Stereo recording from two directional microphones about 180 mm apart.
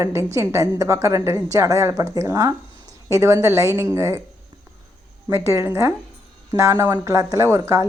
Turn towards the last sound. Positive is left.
turn(degrees=-15)  # may be behind; listen again after turning